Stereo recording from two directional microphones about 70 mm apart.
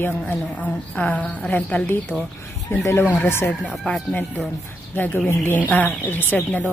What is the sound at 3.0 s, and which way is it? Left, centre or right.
Speech, left.